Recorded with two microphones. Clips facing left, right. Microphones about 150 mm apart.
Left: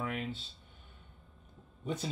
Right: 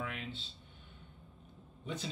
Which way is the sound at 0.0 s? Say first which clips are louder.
Left 5 dB; 45° left (ahead or behind).